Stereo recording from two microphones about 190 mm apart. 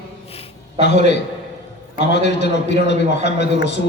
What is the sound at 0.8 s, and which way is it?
A man's voice, 65° left (ahead or behind).